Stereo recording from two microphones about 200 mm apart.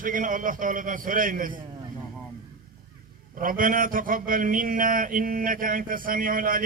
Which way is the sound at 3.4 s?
45° right (ahead or behind).